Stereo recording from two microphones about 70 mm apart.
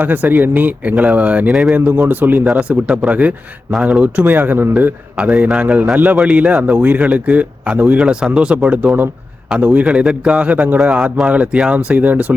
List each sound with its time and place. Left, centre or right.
0.0 s speech: right
2.5 s a man's voice: centre